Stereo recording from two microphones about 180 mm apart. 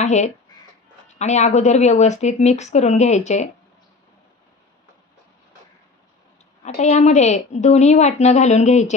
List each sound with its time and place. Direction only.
0.0 s speech: 40° left (ahead or behind)
0.5 s a sound: 25° left (ahead or behind)
1.0 s a woman's voice: 40° left (ahead or behind)
6.6 s a woman's voice: 40° left (ahead or behind)